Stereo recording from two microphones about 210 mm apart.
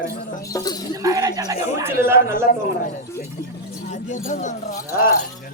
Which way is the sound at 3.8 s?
35° left (ahead or behind).